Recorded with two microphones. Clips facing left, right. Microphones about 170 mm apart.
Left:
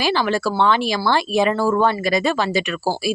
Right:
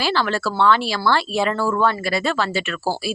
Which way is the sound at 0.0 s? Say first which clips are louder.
Left 2 dB; 15° left (ahead or behind).